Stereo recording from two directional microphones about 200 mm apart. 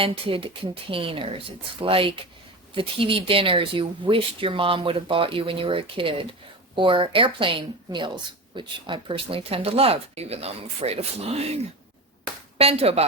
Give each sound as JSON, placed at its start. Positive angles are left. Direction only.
{"t": 0.0, "sound": "speech", "side_deg": -25}
{"t": 12.5, "sound": "speech", "side_deg": -30}